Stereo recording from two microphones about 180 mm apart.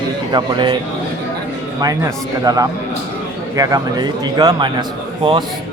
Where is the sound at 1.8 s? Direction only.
20° right (ahead or behind).